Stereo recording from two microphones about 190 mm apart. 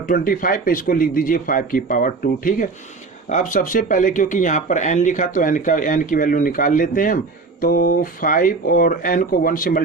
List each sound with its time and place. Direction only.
0.0 s speech: 45° left (ahead or behind)